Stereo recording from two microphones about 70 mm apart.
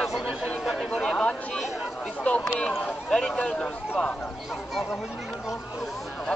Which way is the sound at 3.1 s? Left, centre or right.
Centre.